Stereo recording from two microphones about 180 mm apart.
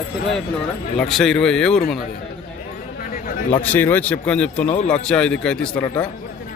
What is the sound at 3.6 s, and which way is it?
Speech, 10° left (ahead or behind).